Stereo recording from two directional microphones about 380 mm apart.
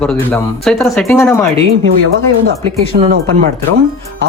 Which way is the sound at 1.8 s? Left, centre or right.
Right.